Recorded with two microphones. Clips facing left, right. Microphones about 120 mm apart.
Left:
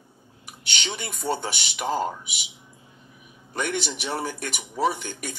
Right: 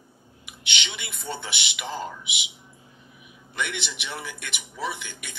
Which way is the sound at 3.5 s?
40° left (ahead or behind).